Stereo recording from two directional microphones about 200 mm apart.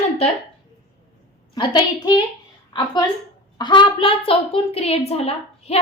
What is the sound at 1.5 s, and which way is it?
A child's voice, 20° left (ahead or behind).